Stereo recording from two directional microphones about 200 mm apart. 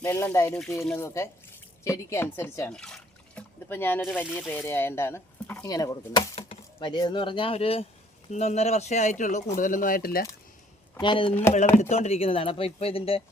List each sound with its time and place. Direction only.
0.0 s speech: 15° left (ahead or behind); by 10.2 s 50° left (ahead or behind)
11.0 s speech: 25° left (ahead or behind)